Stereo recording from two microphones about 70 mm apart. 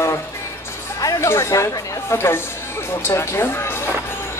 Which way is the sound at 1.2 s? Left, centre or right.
Left.